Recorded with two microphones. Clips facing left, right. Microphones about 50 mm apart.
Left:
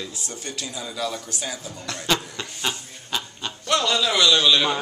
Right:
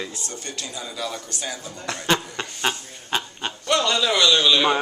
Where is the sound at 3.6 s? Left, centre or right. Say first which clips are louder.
Right 1 dB; centre.